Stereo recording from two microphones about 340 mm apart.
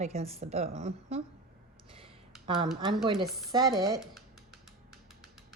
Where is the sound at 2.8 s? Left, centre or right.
Centre.